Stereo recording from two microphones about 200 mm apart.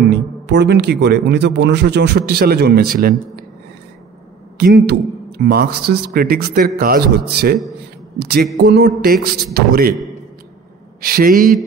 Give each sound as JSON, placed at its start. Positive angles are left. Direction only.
{"t": 0.1, "sound": "speech", "side_deg": -60}
{"t": 4.6, "sound": "a man's voice", "side_deg": -55}
{"t": 11.0, "sound": "a man's voice", "side_deg": -45}